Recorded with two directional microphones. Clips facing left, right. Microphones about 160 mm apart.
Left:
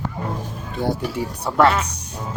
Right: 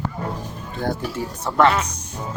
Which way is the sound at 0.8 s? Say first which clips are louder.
Left 2 dB; 10° left (ahead or behind).